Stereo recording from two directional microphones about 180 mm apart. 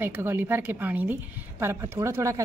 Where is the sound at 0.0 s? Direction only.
10° right (ahead or behind).